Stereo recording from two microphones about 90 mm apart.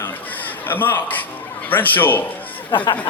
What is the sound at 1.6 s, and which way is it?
Speech, 20° left (ahead or behind).